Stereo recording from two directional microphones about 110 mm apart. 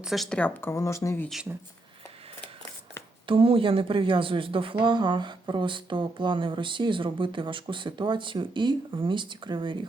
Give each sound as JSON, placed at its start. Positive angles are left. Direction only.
{"t": 0.0, "sound": "speech", "side_deg": 0}
{"t": 0.7, "sound": "speech", "side_deg": 25}
{"t": 3.2, "sound": "speech", "side_deg": -55}